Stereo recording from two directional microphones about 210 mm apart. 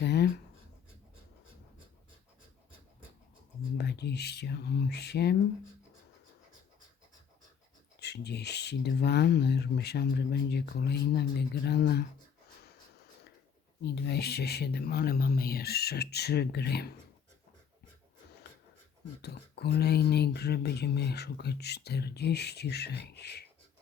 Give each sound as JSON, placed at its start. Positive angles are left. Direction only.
{"t": 0.0, "sound": "writing", "side_deg": 50}
{"t": 3.8, "sound": "speech", "side_deg": 50}
{"t": 7.9, "sound": "speech", "side_deg": 50}
{"t": 13.8, "sound": "speech", "side_deg": 50}
{"t": 19.2, "sound": "speech", "side_deg": 50}